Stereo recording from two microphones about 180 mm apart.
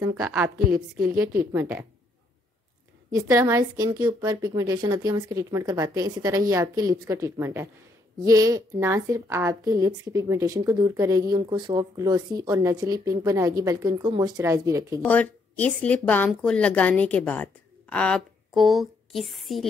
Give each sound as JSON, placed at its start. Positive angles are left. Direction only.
{"t": 0.0, "sound": "a woman's voice", "side_deg": -10}
{"t": 3.1, "sound": "a woman's voice", "side_deg": -15}
{"t": 15.0, "sound": "a woman's voice", "side_deg": 10}